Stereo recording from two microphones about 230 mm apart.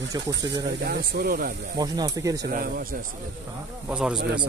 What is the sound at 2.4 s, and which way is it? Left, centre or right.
Speech, right.